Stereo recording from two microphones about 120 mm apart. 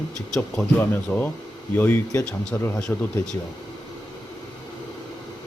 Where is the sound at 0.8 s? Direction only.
15° left (ahead or behind).